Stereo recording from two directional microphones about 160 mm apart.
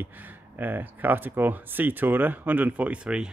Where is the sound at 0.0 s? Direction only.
10° right (ahead or behind).